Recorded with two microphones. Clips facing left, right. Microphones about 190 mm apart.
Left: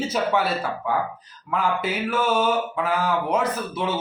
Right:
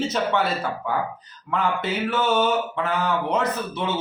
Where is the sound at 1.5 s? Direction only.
10° left (ahead or behind).